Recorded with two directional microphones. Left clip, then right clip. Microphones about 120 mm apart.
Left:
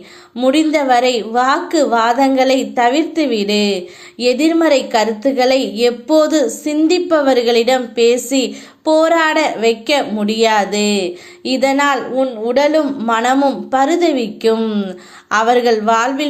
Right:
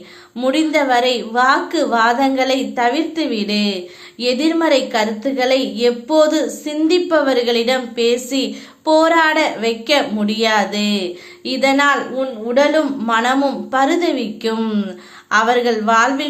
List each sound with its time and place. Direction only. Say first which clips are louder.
0.3 s a woman's voice: left 2 dB; 30° left (ahead or behind); by 12.8 s 45° left (ahead or behind)
12.8 s a woman's voice: left 1 dB; 30° left (ahead or behind)